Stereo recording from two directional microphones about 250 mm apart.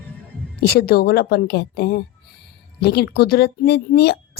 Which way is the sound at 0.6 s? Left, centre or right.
Left.